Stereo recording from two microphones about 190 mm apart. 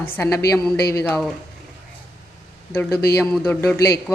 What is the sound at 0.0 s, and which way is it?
Speech, 10° left (ahead or behind).